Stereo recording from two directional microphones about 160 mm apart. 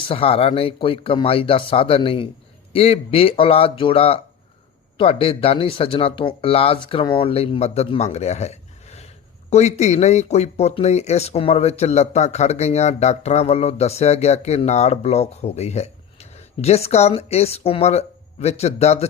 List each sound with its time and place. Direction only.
0.0 s speech: 35° left (ahead or behind)